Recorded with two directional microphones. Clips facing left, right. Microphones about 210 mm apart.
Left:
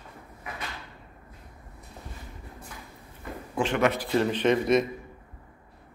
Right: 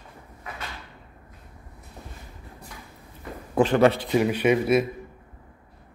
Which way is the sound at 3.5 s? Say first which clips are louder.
Right 6 dB; 40° right (ahead or behind).